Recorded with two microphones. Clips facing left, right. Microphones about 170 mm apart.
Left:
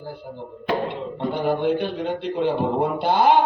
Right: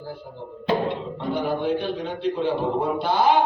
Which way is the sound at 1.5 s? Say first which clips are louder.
Left 4 dB; 55° left (ahead or behind).